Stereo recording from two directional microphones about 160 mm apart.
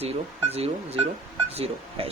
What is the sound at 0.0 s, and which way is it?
Speech, 40° right (ahead or behind).